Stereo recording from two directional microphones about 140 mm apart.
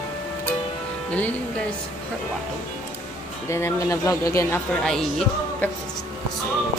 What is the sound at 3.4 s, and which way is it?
Speech, 20° left (ahead or behind).